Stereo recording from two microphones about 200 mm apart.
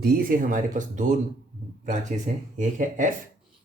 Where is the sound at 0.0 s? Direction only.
50° right (ahead or behind).